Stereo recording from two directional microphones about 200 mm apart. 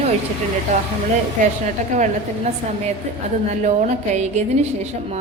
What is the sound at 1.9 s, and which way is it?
Speech, 35° right (ahead or behind).